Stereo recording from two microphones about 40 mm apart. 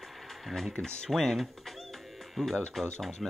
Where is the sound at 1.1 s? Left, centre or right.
Centre.